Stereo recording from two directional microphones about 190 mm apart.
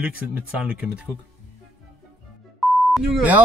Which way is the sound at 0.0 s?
5° right (ahead or behind).